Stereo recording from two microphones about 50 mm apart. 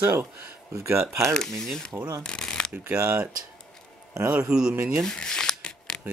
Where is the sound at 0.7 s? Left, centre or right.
Right.